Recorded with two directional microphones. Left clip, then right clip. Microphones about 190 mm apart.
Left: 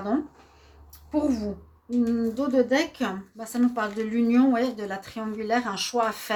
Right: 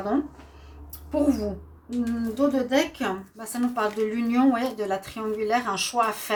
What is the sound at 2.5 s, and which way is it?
A woman's voice, 45° left (ahead or behind).